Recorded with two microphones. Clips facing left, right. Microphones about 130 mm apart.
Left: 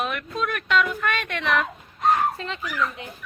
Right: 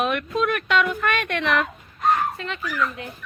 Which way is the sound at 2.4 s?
30° left (ahead or behind).